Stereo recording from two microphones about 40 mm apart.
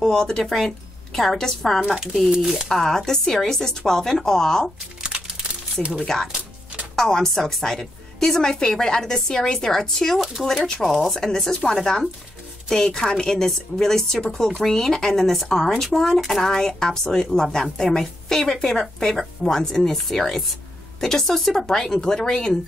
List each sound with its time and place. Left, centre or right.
0.0 s speech: centre
2.7 s speech: centre
5.0 s crumpling: right
7.0 s speech: centre